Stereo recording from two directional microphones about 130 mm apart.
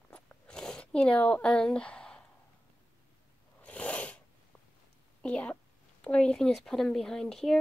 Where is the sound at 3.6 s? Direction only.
10° left (ahead or behind).